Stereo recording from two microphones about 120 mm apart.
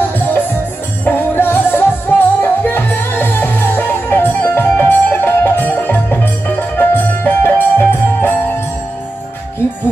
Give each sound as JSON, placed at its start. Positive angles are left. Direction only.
{"t": 1.0, "sound": "music", "side_deg": 15}